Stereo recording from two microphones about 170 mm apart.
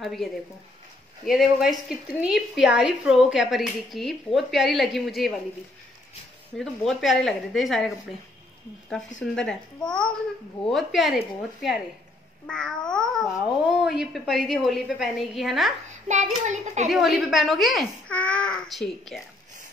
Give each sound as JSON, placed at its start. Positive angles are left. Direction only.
{"t": 0.0, "sound": "speech", "side_deg": 0}
{"t": 6.5, "sound": "speech", "side_deg": 0}
{"t": 9.2, "sound": "speech", "side_deg": 5}
{"t": 16.1, "sound": "a child's voice", "side_deg": -45}
{"t": 16.9, "sound": "speech", "side_deg": 0}